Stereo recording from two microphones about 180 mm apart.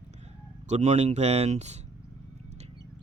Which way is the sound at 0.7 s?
40° right (ahead or behind).